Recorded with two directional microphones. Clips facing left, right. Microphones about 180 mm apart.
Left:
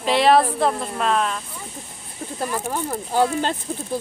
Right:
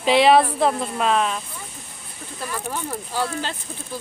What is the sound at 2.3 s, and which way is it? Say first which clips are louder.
Speech: left 4 dB; 45° left (ahead or behind).